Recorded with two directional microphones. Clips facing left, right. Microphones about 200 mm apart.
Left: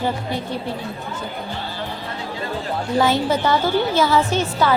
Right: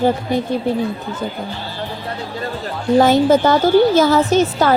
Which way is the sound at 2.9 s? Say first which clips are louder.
Right 7 dB; 45° right (ahead or behind).